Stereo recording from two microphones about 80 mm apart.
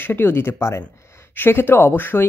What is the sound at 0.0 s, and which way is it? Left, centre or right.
Speech, left.